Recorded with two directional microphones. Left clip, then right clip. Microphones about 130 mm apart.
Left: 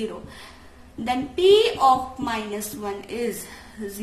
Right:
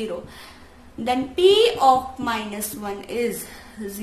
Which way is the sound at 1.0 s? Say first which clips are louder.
Right 1 dB; 35° right (ahead or behind).